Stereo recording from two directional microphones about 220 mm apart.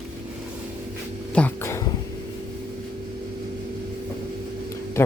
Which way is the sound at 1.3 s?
10° left (ahead or behind).